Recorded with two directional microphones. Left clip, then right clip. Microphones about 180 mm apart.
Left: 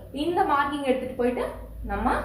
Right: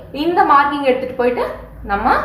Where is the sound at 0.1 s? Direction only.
5° right (ahead or behind).